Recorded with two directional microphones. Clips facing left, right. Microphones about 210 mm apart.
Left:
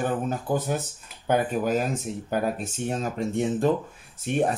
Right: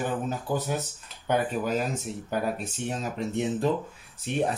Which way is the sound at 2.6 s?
45° left (ahead or behind).